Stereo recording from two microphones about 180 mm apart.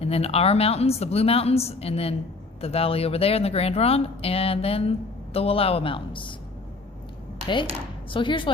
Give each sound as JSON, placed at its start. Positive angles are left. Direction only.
{"t": 0.0, "sound": "speech", "side_deg": 35}
{"t": 7.4, "sound": "speech", "side_deg": 25}